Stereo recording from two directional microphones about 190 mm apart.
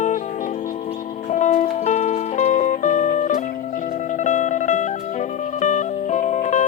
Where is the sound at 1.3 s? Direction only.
40° left (ahead or behind).